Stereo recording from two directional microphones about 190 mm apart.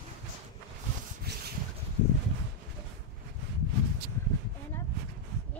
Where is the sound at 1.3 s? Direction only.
60° right (ahead or behind).